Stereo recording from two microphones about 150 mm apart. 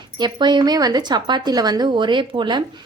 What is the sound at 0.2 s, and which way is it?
Speech, 30° right (ahead or behind).